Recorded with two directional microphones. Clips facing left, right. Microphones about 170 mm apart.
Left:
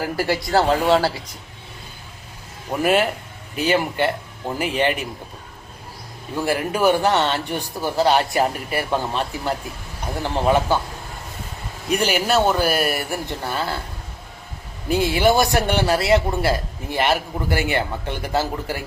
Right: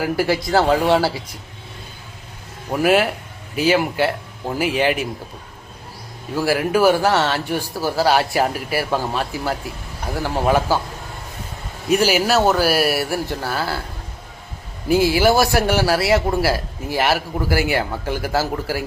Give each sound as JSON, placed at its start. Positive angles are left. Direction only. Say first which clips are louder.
{"t": 0.0, "sound": "a man's voice", "louder": "right 3 dB", "side_deg": 0}
{"t": 2.6, "sound": "speech", "louder": "right 2 dB", "side_deg": -5}
{"t": 6.3, "sound": "a man's voice", "louder": "right 4 dB", "side_deg": -5}
{"t": 11.9, "sound": "a man's voice", "louder": "right 3 dB", "side_deg": -5}
{"t": 14.8, "sound": "a man's voice", "louder": "right 2 dB", "side_deg": -5}